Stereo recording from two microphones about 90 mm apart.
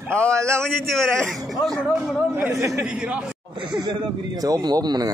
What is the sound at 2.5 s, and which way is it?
Speech, 35° right (ahead or behind).